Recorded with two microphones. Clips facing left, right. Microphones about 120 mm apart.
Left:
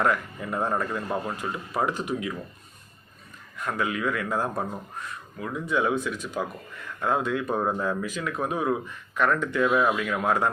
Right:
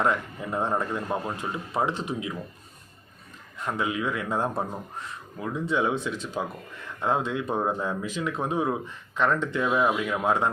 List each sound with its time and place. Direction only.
0.0 s speech: 20° right (ahead or behind)
3.6 s speech: 20° right (ahead or behind)